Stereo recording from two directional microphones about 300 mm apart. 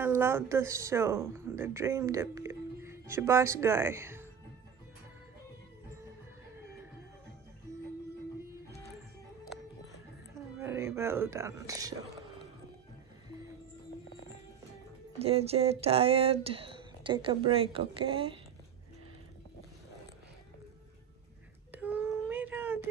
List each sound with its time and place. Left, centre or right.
0.0 s speech: centre
10.6 s speech: centre
15.1 s speech: centre
21.7 s child singing: centre